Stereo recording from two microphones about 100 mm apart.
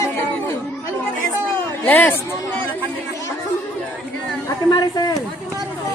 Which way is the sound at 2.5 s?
15° left (ahead or behind).